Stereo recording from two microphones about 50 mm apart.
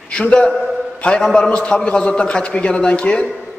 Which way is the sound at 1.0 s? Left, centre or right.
Centre.